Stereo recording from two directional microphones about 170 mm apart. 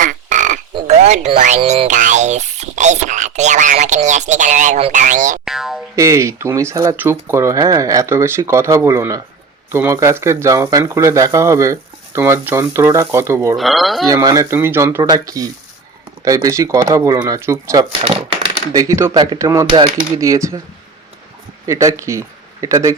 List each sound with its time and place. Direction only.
0.0 s frog: 45° right (ahead or behind)
5.5 s boing: centre (ahead or behind)
6.0 s speech: 15° right (ahead or behind)
13.6 s speech: centre (ahead or behind)
14.1 s speech: 20° right (ahead or behind)
21.7 s speech: 20° right (ahead or behind)